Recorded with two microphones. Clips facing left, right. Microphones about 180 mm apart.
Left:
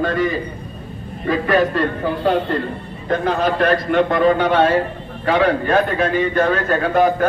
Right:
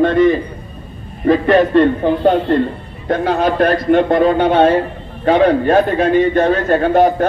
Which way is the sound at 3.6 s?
40° right (ahead or behind).